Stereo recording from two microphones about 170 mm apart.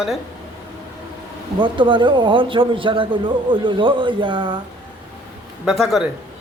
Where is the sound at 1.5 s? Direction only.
30° right (ahead or behind).